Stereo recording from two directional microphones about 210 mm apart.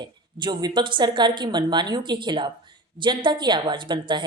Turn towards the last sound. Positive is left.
turn(degrees=-20)  # may be behind; listen again after turning